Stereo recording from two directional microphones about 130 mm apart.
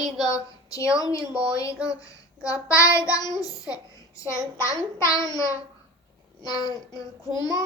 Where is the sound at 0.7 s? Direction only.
25° left (ahead or behind).